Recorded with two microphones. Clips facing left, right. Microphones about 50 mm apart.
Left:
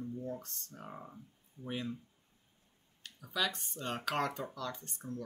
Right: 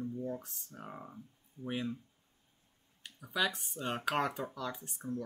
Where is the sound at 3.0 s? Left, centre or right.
Centre.